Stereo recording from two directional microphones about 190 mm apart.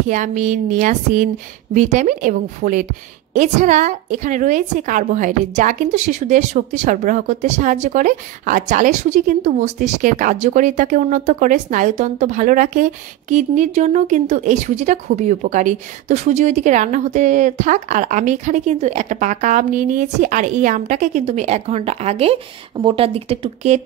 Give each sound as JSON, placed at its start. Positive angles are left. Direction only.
{"t": 0.1, "sound": "a woman's voice", "side_deg": -40}